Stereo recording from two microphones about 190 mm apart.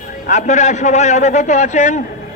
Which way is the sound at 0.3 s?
40° left (ahead or behind).